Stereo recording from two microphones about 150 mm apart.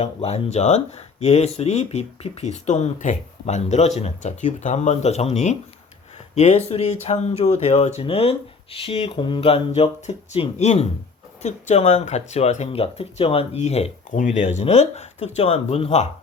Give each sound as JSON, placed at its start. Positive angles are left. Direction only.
{"t": 0.0, "sound": "speech", "side_deg": 45}